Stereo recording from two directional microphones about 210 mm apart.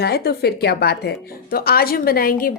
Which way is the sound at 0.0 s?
50° left (ahead or behind).